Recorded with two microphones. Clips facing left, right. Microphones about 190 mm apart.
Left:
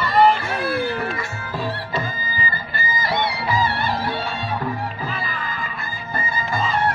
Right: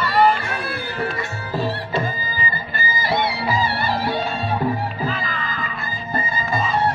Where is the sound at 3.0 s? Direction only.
30° right (ahead or behind).